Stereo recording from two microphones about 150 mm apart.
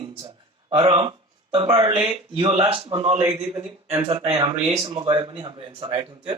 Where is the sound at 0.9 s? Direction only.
35° right (ahead or behind).